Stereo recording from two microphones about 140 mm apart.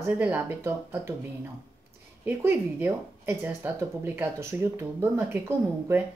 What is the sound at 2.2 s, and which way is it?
Speech, 15° right (ahead or behind).